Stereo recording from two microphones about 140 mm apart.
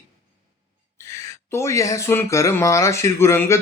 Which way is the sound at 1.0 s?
20° left (ahead or behind).